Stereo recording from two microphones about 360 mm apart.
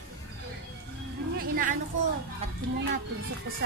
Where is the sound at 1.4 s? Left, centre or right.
Right.